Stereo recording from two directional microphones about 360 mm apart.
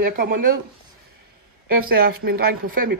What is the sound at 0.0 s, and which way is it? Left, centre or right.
Speech, right.